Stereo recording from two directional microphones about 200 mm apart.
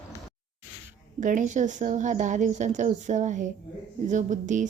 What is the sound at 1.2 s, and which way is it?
A woman's voice, 40° right (ahead or behind).